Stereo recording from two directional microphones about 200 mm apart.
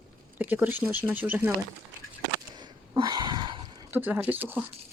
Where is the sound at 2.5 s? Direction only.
20° right (ahead or behind).